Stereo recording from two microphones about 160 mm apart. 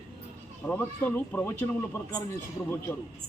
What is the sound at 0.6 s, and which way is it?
A man's voice, 10° left (ahead or behind).